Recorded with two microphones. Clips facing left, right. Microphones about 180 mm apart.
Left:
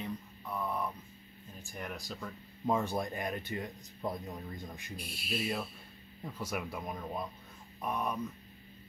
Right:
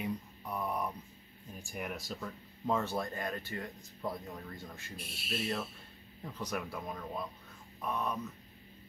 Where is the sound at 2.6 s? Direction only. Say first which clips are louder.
Left 1 dB; 15° left (ahead or behind).